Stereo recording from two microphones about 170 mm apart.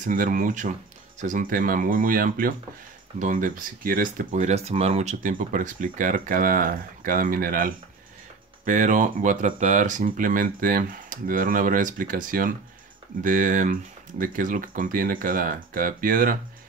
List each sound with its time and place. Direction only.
0.0 s speech: 50° right (ahead or behind)